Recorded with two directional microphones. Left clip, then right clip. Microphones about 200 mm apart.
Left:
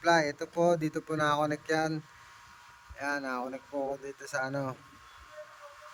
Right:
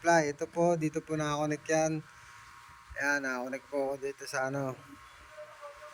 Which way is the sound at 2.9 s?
Centre (ahead or behind).